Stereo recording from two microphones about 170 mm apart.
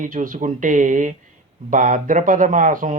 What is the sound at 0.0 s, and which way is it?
Speech, 50° right (ahead or behind).